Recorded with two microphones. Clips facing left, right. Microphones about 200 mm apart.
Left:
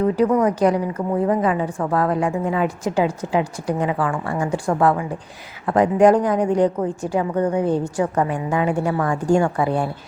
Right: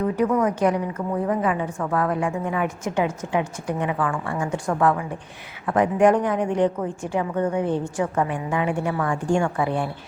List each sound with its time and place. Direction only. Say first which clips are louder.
0.0 s a woman's voice: left 4 dB; 35° left (ahead or behind)